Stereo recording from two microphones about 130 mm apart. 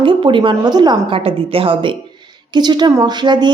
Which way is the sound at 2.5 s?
35° right (ahead or behind).